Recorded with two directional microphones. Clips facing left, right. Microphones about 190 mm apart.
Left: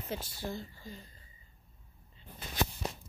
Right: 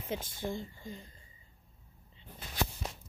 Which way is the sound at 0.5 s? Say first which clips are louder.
Right 2 dB; 20° right (ahead or behind).